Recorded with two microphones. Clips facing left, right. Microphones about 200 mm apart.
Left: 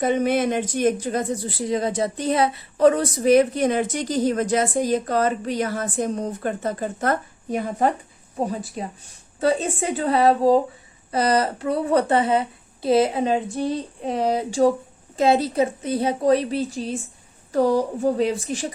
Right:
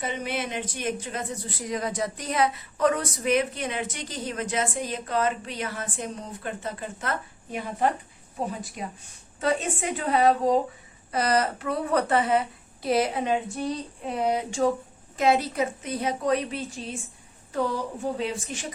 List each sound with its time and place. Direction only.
0.0 s a woman's voice: 45° left (ahead or behind)